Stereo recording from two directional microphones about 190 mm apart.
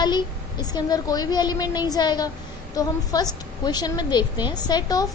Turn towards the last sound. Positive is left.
turn(degrees=20)  # may be behind; listen again after turning